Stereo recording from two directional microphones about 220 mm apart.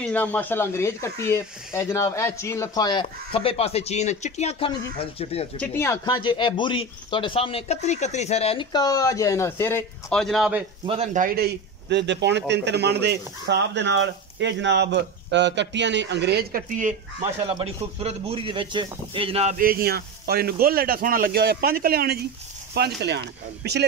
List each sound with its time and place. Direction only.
0.0 s speech: 5° left (ahead or behind); by 5.5 s 25° left (ahead or behind)
5.6 s speech: 10° left (ahead or behind)
10.9 s a man's voice: 35° right (ahead or behind)
17.5 s speech: 25° right (ahead or behind)
19.6 s a man's voice: 45° right (ahead or behind)